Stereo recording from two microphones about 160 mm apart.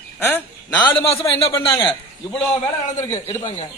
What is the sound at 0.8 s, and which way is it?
Speech, 35° left (ahead or behind).